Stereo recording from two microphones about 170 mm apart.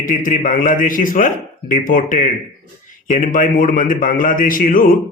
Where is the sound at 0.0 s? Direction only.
50° left (ahead or behind).